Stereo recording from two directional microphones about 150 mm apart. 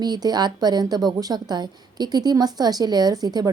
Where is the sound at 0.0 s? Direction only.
25° right (ahead or behind).